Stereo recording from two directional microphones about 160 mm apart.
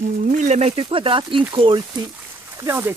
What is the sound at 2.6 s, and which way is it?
Speech, 15° right (ahead or behind).